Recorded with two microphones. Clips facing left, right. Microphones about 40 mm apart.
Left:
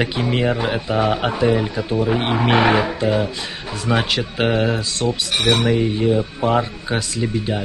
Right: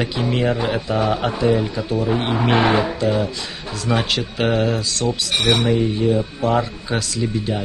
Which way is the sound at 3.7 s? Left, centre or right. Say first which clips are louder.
Left 1 dB; left.